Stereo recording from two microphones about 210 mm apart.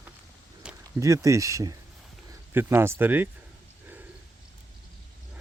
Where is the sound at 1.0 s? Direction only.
15° right (ahead or behind).